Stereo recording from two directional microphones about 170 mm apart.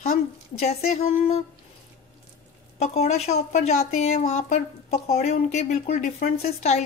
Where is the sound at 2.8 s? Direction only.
40° left (ahead or behind).